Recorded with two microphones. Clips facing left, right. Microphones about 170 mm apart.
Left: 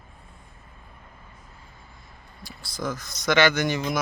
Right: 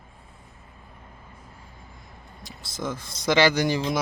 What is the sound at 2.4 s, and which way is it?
Speech, 20° right (ahead or behind).